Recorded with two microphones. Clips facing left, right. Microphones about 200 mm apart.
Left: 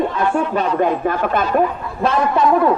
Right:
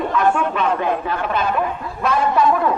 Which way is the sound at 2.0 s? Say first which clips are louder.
Left 1 dB; 30° left (ahead or behind).